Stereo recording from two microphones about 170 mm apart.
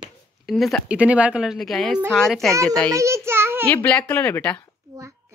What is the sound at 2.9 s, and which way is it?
Speech, 15° right (ahead or behind).